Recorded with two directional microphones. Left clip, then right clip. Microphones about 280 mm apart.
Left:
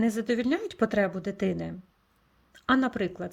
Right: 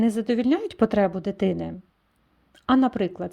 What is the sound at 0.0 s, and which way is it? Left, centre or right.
Speech, centre.